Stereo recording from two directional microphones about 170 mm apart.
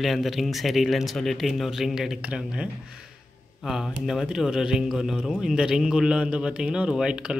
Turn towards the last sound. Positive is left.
turn(degrees=-5)  # may be behind; listen again after turning